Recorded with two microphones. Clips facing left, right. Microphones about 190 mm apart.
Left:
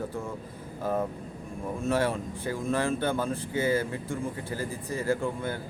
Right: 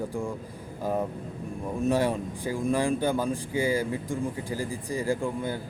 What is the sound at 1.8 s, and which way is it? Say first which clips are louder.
A man's voice: right 2 dB; 15° right (ahead or behind).